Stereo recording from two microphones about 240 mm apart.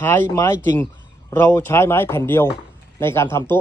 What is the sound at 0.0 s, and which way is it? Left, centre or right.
Speech, centre.